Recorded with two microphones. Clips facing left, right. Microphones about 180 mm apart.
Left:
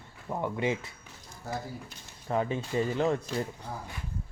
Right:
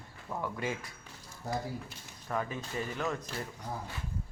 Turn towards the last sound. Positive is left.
turn(degrees=30)  # may be behind; listen again after turning